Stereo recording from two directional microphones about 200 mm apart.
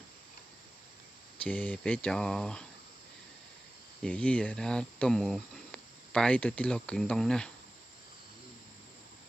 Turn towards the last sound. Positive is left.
turn(degrees=5)  # may be behind; listen again after turning